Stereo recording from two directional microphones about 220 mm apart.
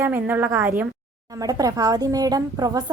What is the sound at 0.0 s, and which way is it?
A woman's voice, 10° right (ahead or behind).